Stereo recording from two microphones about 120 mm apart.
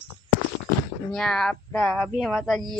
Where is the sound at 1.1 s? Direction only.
5° left (ahead or behind).